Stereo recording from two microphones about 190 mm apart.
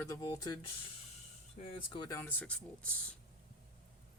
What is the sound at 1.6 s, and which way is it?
Speech, 25° left (ahead or behind).